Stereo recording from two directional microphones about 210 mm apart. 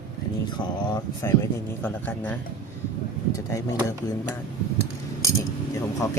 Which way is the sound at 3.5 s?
15° left (ahead or behind).